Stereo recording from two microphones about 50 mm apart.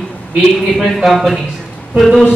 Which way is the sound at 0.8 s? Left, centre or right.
Centre.